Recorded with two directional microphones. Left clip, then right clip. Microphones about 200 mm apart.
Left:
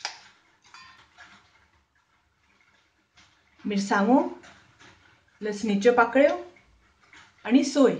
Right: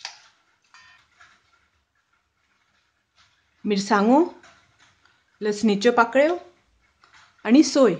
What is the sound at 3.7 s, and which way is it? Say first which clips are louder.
Speech: right 4 dB; 45° right (ahead or behind).